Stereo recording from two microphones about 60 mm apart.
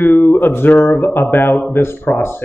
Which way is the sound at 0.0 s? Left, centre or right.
Left.